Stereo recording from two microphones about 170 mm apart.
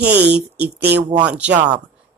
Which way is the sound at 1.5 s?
45° right (ahead or behind).